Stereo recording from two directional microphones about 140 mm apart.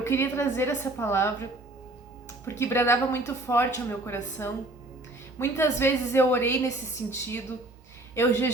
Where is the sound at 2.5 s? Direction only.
20° left (ahead or behind).